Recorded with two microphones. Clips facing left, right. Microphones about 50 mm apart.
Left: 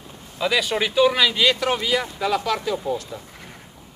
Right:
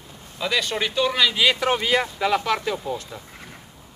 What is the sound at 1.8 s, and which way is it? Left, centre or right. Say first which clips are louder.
Speech: right 1 dB; right.